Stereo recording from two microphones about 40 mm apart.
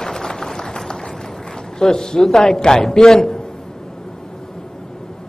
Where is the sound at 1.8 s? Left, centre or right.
Centre.